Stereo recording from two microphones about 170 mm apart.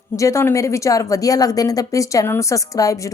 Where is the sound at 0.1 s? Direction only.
15° left (ahead or behind).